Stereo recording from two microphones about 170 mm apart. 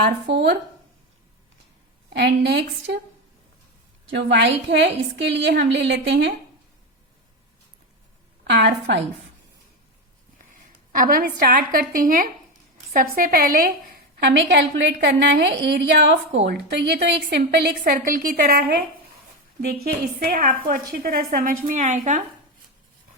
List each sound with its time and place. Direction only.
0.0 s a woman's voice: 85° right
2.1 s a woman's voice: 75° right (ahead or behind)
4.1 s a woman's voice: 90° right
8.4 s a woman's voice: 85° right
10.3 s a woman's voice: 50° right (ahead or behind)
14.2 s a woman's voice: 90° right
16.5 s a woman's voice: 70° right (ahead or behind)
19.8 s a woman's voice: 60° right (ahead or behind)